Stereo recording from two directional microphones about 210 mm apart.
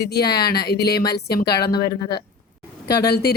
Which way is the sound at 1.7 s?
20° left (ahead or behind).